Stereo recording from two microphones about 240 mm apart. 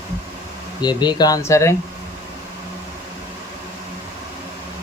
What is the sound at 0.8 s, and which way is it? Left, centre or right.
Speech, centre.